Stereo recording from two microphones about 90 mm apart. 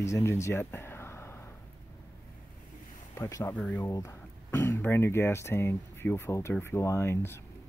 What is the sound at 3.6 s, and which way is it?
Speech, 15° left (ahead or behind).